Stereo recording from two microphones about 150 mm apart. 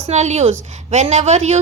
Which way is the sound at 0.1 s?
50° right (ahead or behind).